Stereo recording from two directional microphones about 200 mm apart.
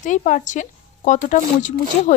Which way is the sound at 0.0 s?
40° left (ahead or behind).